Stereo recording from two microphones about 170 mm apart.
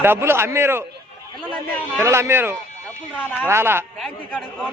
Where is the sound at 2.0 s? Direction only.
15° right (ahead or behind).